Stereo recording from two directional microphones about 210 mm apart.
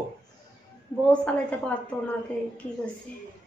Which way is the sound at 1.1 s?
5° left (ahead or behind).